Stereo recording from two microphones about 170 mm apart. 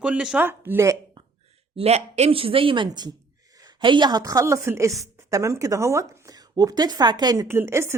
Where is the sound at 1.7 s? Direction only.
40° right (ahead or behind).